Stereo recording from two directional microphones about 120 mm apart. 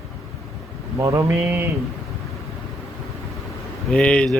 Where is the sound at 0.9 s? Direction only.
25° right (ahead or behind).